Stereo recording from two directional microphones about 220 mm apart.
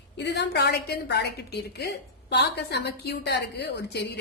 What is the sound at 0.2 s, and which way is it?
A woman's voice, 50° left (ahead or behind).